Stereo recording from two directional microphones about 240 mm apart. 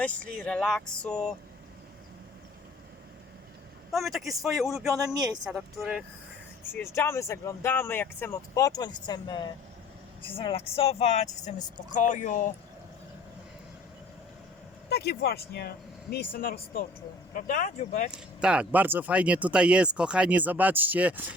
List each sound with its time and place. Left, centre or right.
0.0 s speech: centre
3.9 s speech: centre
4.9 s speech: centre
5.5 s speech: centre
6.7 s speech: centre; by 12.5 s left
14.8 s speech: left
18.1 s speech: centre